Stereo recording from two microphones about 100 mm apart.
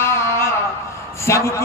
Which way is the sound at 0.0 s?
25° left (ahead or behind).